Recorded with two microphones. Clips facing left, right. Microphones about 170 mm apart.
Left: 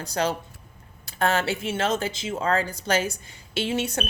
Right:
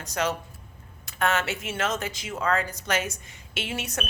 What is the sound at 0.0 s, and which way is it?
Speech, 30° left (ahead or behind).